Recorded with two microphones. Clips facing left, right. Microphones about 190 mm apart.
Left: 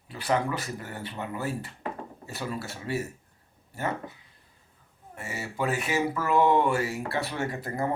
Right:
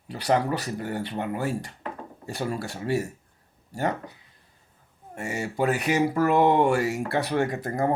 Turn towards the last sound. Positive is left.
turn(degrees=-40)  # may be behind; listen again after turning